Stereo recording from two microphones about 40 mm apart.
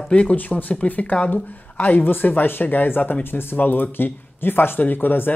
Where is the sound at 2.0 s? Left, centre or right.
Left.